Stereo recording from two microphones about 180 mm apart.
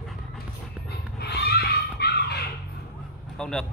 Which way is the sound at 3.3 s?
5° left (ahead or behind).